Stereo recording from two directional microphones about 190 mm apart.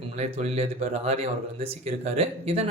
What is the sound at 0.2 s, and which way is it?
Speech, 35° right (ahead or behind).